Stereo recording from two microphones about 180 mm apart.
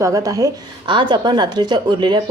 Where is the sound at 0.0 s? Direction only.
20° right (ahead or behind).